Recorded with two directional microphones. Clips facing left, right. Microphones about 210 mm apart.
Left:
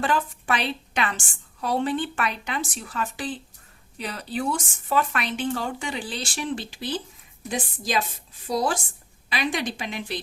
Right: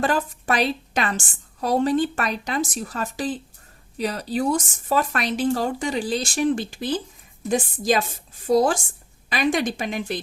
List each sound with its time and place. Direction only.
0.0 s speech: 40° right (ahead or behind)